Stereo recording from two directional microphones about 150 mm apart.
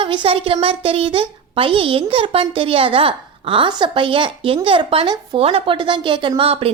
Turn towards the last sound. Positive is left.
turn(degrees=-40)  # may be behind; listen again after turning